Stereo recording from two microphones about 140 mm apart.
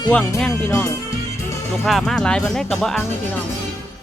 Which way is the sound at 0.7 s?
20° left (ahead or behind).